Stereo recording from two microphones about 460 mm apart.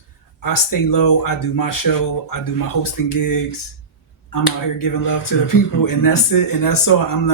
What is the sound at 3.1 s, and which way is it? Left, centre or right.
Speech, left.